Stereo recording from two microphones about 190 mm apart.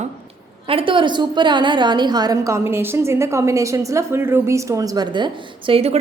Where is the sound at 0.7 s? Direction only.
30° right (ahead or behind).